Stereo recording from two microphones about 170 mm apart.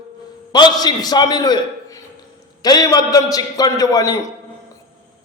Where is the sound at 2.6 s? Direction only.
20° left (ahead or behind).